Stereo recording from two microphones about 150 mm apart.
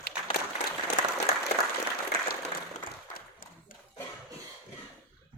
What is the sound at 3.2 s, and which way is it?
Clapping, 75° left (ahead or behind).